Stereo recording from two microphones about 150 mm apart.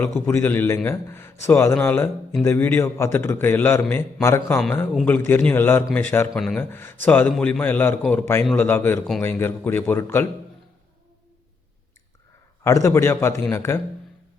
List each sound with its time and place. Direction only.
0.0 s a man's voice: 15° left (ahead or behind)
6.7 s a man's voice: 15° left (ahead or behind)
12.6 s a man's voice: 20° left (ahead or behind)